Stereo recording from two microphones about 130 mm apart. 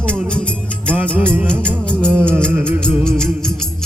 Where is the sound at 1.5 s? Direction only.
10° left (ahead or behind).